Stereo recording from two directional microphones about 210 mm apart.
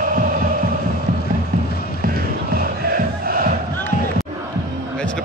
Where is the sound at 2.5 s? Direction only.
45° right (ahead or behind).